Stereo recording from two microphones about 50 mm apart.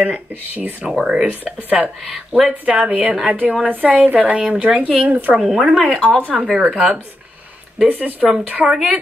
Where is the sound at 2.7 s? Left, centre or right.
Right.